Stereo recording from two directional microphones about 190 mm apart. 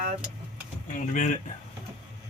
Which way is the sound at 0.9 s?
45° left (ahead or behind).